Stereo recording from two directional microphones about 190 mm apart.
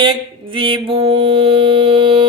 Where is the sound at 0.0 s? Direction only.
25° right (ahead or behind).